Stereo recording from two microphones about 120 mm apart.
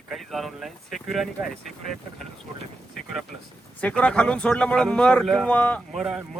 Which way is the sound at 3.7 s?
10° left (ahead or behind).